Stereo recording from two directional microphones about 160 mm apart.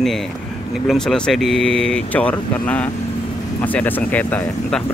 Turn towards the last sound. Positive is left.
turn(degrees=5)  # may be behind; listen again after turning